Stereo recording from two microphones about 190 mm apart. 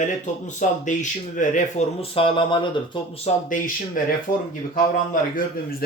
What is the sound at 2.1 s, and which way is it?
Speech, 25° left (ahead or behind).